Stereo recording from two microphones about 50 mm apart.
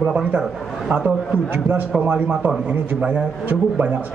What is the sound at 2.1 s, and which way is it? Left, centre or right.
Speech, right.